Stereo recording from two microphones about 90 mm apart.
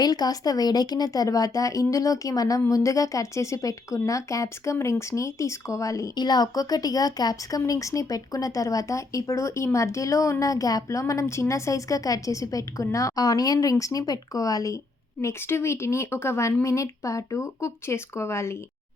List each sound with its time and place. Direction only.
0.0 s a woman's voice: 45° left (ahead or behind)
6.1 s a woman's voice: 50° left (ahead or behind); by 18.5 s 30° left (ahead or behind)